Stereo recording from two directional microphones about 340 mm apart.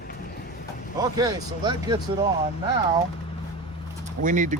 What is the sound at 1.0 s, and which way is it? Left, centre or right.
Speech, centre.